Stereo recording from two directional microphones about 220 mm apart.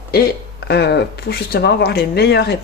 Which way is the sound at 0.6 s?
50° left (ahead or behind).